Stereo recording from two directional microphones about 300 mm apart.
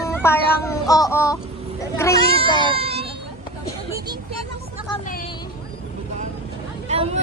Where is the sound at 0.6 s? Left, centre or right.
Centre.